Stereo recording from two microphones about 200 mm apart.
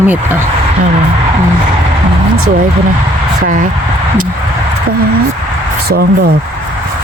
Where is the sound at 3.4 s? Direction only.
45° right (ahead or behind).